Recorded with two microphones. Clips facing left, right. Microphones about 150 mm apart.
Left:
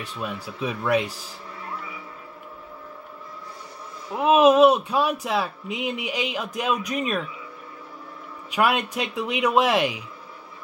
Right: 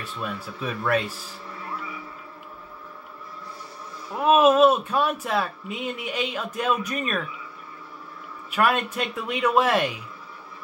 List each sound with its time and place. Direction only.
0.0 s speech: 15° left (ahead or behind)
4.1 s speech: 15° left (ahead or behind)
8.5 s speech: 15° left (ahead or behind)